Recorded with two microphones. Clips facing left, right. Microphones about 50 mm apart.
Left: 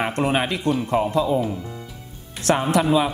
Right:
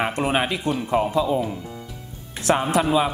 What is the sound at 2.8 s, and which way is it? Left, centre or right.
Speech, centre.